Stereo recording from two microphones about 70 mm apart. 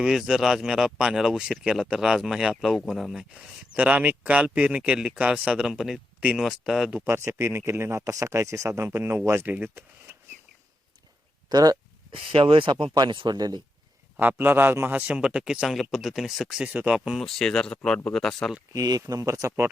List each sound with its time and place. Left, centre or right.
0.0 s speech: centre
3.3 s speech: right
6.4 s speech: centre
7.0 s speech: right
11.4 s speech: right
12.7 s speech: right
14.2 s speech: right
15.1 s speech: centre
16.6 s speech: centre
17.2 s speech: centre
18.7 s speech: right